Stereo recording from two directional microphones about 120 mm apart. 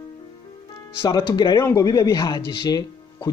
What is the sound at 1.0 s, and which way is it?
Speech, 40° left (ahead or behind).